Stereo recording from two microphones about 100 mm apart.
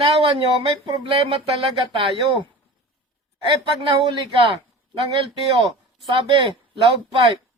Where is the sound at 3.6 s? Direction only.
55° right (ahead or behind).